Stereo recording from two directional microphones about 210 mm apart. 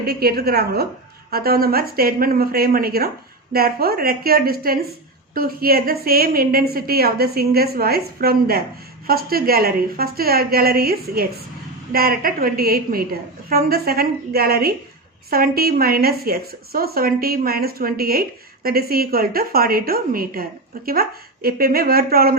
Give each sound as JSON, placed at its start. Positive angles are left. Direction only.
{"t": 0.0, "sound": "a woman's voice", "side_deg": -45}